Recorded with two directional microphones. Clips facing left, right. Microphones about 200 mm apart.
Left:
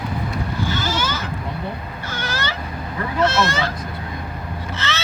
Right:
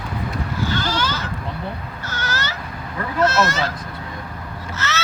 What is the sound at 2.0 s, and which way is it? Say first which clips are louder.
Owl: even; 10° left (ahead or behind).